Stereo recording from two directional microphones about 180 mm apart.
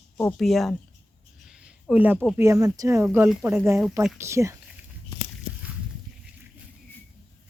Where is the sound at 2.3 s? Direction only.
15° right (ahead or behind).